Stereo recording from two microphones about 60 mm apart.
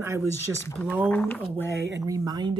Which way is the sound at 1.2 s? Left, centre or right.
Left.